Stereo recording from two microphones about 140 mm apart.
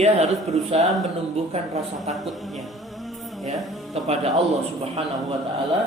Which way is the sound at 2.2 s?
Centre (ahead or behind).